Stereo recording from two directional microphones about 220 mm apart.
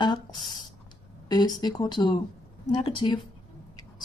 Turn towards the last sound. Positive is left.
turn(degrees=25)  # may be behind; listen again after turning